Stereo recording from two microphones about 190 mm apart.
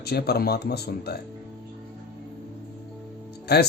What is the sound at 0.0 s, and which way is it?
Speech, 55° left (ahead or behind).